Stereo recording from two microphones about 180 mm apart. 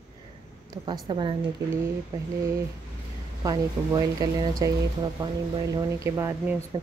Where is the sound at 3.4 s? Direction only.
20° right (ahead or behind).